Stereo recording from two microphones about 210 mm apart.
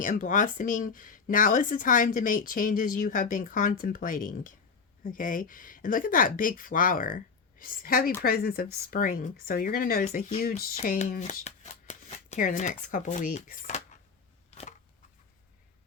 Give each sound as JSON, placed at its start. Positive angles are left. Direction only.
{"t": 0.0, "sound": "speech", "side_deg": 40}